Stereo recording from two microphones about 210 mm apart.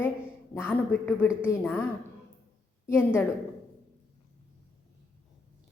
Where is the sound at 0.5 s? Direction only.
10° left (ahead or behind).